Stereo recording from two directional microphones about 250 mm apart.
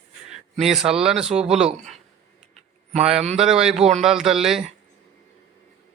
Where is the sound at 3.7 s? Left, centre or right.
Right.